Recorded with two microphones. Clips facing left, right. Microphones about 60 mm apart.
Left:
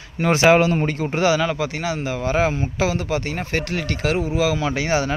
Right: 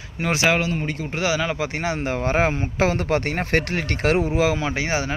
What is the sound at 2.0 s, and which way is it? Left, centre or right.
Speech, right.